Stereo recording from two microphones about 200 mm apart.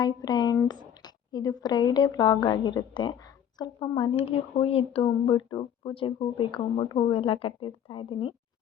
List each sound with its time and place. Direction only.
0.0 s speech: 20° left (ahead or behind)